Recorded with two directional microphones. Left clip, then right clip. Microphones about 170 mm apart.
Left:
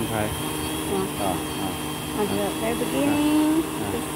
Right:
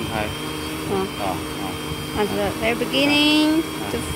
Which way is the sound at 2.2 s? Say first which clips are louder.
Right 4 dB; 10° right (ahead or behind).